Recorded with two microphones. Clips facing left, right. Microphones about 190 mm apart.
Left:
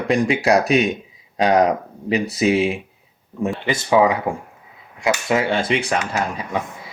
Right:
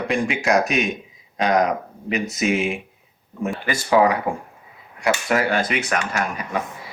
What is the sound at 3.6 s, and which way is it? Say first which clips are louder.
Speech: left 1 dB; 20° left (ahead or behind).